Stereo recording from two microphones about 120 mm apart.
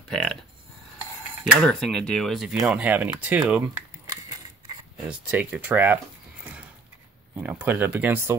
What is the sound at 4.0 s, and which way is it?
Mechanisms, 30° right (ahead or behind).